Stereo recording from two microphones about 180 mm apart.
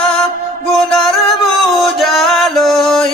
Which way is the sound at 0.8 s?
Centre (ahead or behind).